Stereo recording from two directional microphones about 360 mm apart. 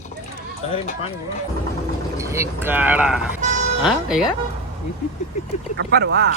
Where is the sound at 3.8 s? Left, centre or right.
Centre.